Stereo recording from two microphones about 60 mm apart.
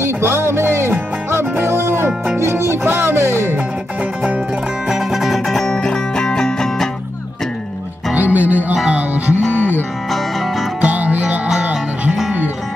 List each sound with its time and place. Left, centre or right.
0.0 s music: right
4.8 s music: centre
8.1 s music: right
9.6 s music: left
10.1 s music: centre
10.8 s music: right